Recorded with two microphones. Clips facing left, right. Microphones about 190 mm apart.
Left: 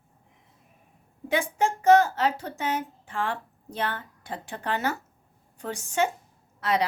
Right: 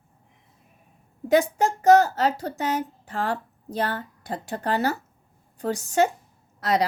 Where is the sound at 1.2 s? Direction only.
40° right (ahead or behind).